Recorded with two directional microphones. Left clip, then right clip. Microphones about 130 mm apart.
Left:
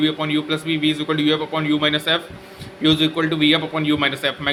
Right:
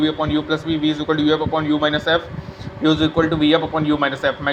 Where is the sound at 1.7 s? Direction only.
15° left (ahead or behind).